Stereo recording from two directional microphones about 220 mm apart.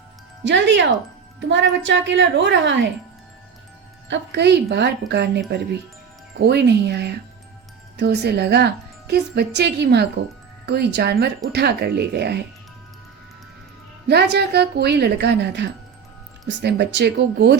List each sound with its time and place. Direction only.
0.4 s speech: 55° right (ahead or behind)
4.1 s speech: 50° right (ahead or behind)
6.4 s speech: 50° right (ahead or behind)
14.1 s speech: 50° right (ahead or behind)